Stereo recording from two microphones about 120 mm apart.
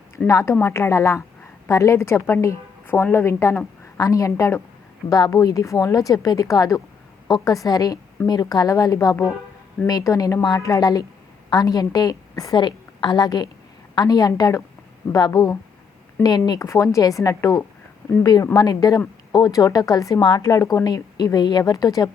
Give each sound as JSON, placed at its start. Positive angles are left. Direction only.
{"t": 0.3, "sound": "a woman's voice", "side_deg": 25}